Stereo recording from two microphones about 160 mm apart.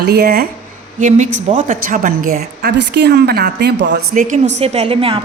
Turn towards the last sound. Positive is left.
turn(degrees=-35)  # may be behind; listen again after turning